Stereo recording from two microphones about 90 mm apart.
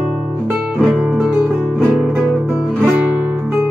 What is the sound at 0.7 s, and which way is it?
Guitar, 5° left (ahead or behind).